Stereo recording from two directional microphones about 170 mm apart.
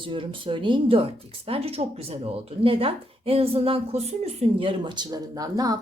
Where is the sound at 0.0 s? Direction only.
30° right (ahead or behind).